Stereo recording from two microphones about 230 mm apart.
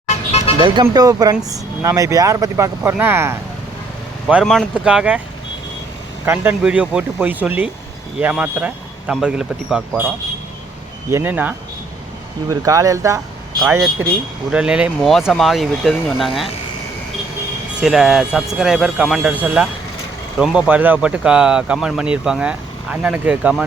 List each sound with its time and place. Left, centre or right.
0.3 s vehicle: left
0.6 s speech: centre
6.2 s speech: centre
11.1 s speech: centre
17.7 s speech: centre